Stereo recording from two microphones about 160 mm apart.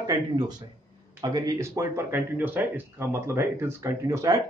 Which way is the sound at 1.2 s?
25° right (ahead or behind).